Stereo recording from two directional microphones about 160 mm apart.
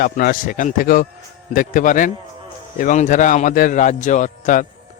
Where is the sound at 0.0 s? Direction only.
70° left (ahead or behind).